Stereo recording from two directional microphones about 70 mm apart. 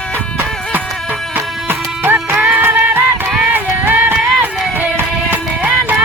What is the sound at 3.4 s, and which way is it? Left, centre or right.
Run, right.